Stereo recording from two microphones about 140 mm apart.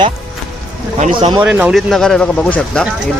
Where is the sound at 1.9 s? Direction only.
5° left (ahead or behind).